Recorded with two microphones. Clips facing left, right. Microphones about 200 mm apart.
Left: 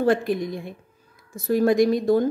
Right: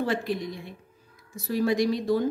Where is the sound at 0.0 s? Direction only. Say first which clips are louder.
Left 7 dB; 50° left (ahead or behind).